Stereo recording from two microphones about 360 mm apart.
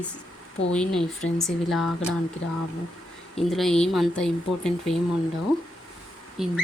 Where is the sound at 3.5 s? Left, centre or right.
Centre.